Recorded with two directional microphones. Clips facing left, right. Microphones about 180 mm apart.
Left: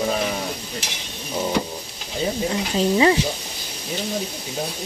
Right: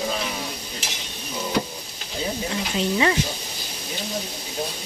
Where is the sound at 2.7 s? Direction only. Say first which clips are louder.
Left 5 dB; 30° left (ahead or behind).